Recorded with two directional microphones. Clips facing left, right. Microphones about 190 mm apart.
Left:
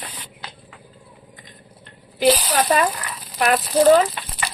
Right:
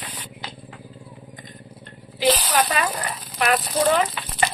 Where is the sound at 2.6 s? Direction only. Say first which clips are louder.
Left 4 dB; 35° left (ahead or behind).